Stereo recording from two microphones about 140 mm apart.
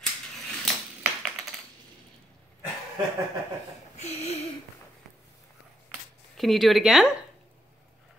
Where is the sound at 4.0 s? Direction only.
50° left (ahead or behind).